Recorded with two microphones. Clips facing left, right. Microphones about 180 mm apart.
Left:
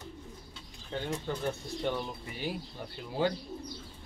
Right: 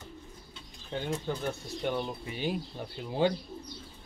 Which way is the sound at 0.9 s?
5° right (ahead or behind).